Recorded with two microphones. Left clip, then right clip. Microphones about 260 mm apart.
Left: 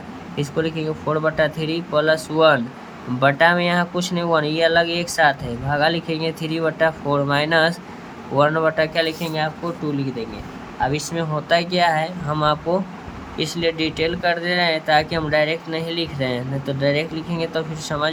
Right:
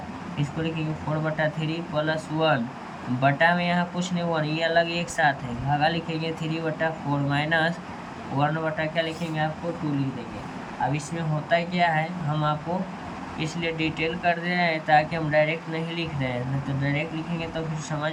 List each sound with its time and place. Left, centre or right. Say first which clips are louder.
0.3 s speech: left 8 dB; centre
10.9 s speech: left 7 dB; left